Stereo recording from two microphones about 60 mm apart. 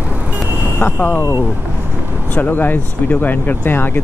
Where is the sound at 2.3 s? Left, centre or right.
Left.